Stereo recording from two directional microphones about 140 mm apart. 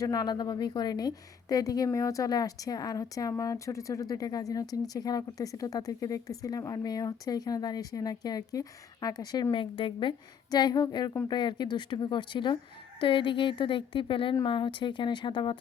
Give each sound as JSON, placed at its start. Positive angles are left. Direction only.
{"t": 0.0, "sound": "a woman's voice", "side_deg": 30}